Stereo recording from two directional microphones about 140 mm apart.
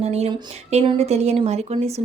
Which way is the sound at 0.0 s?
50° right (ahead or behind).